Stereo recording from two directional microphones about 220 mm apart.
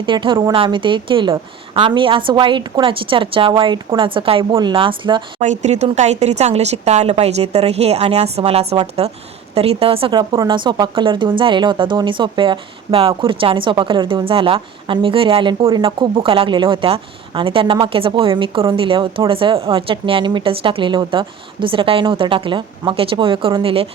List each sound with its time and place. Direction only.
0.0 s speech: 20° right (ahead or behind)
5.4 s speech: 35° right (ahead or behind)